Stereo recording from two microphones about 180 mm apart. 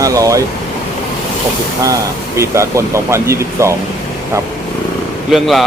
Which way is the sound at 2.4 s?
15° right (ahead or behind).